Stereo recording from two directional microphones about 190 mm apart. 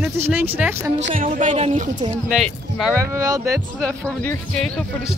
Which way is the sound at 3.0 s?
15° right (ahead or behind).